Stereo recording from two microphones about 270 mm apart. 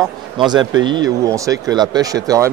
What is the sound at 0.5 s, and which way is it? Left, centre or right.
Speech, centre.